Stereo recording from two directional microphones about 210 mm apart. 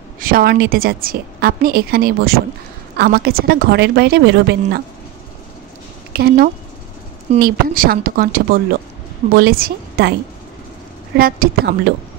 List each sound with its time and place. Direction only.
0.2 s a woman's voice: 45° right (ahead or behind)
6.1 s a woman's voice: 45° right (ahead or behind)
11.1 s a woman's voice: 45° right (ahead or behind)